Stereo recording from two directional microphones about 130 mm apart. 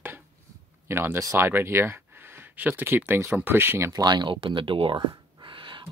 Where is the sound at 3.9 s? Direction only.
30° right (ahead or behind).